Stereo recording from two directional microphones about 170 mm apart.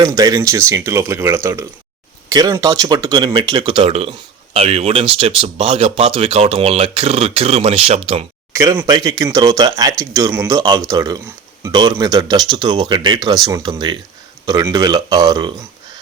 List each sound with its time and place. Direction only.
0.0 s speech: 20° right (ahead or behind)
8.5 s speech: 15° right (ahead or behind)